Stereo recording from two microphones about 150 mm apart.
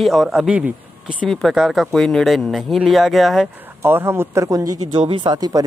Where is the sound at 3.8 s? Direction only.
15° right (ahead or behind).